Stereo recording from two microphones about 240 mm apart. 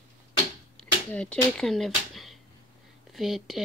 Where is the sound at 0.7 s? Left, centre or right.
Centre.